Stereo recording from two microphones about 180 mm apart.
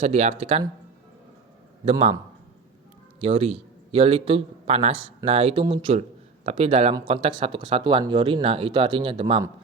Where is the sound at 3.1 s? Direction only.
30° right (ahead or behind).